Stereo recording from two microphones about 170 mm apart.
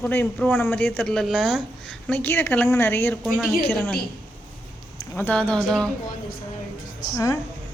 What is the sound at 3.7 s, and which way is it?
Speech, 10° left (ahead or behind).